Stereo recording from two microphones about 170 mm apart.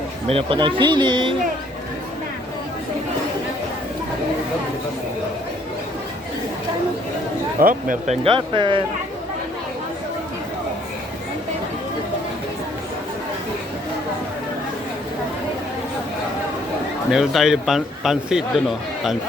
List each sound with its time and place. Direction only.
0.3 s speech: 35° right (ahead or behind)
7.6 s speech: 55° right (ahead or behind); by 8.8 s 30° right (ahead or behind)
17.1 s speech: 5° right (ahead or behind)